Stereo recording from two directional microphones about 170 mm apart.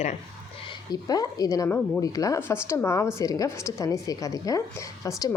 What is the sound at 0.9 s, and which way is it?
A woman's voice, 20° left (ahead or behind).